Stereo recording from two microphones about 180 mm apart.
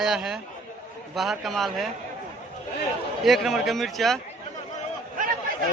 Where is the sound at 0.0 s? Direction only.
5° right (ahead or behind).